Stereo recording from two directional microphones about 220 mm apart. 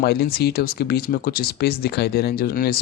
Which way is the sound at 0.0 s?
45° left (ahead or behind).